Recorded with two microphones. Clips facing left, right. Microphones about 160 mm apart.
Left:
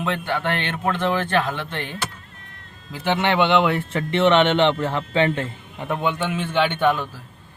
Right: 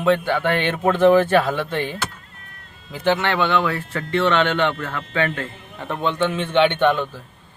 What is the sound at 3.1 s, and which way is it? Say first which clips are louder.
Speech: left 6 dB; 20° left (ahead or behind).